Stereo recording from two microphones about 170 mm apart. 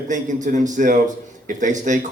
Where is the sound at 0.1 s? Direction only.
45° right (ahead or behind).